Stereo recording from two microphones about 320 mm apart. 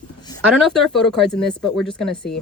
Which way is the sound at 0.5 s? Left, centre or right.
Centre.